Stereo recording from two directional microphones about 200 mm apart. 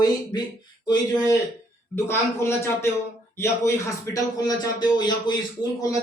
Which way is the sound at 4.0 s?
20° left (ahead or behind).